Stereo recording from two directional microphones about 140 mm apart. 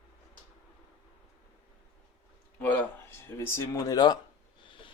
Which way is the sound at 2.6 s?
10° left (ahead or behind).